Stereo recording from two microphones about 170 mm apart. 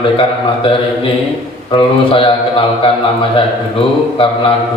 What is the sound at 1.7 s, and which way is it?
A man's voice, 30° left (ahead or behind).